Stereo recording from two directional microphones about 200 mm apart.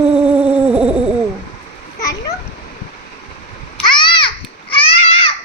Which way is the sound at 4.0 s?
25° left (ahead or behind).